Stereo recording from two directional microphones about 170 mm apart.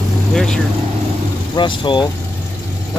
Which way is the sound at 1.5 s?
30° left (ahead or behind).